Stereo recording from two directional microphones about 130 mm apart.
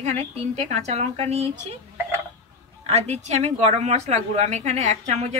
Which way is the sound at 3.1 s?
60° right (ahead or behind).